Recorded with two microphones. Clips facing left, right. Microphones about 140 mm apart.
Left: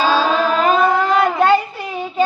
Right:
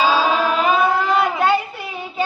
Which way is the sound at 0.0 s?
10° right (ahead or behind).